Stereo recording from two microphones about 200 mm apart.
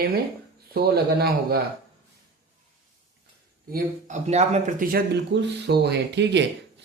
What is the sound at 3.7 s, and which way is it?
A man's voice, 35° right (ahead or behind).